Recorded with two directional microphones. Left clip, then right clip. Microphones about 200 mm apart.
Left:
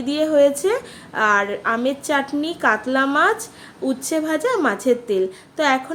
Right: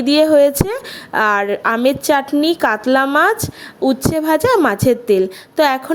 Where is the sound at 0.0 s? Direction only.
45° right (ahead or behind).